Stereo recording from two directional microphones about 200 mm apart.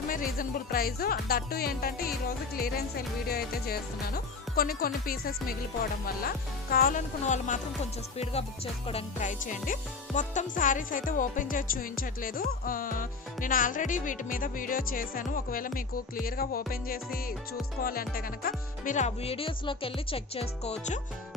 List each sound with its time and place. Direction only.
0.1 s speech: 45° left (ahead or behind)